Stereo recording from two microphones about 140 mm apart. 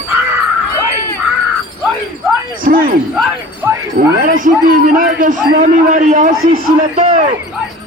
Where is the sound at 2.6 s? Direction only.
90° right.